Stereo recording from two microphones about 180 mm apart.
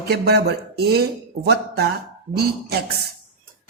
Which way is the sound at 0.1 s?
65° right (ahead or behind).